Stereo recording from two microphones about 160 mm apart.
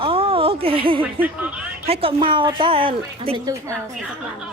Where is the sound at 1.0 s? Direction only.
10° right (ahead or behind).